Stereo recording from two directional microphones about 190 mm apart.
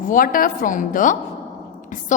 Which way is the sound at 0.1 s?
45° left (ahead or behind).